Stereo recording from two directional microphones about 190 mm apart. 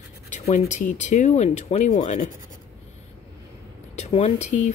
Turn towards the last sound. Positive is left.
turn(degrees=40)  # may be behind; listen again after turning